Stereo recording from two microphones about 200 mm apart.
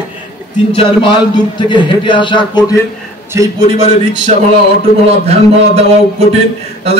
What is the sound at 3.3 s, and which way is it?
Speech, 15° right (ahead or behind).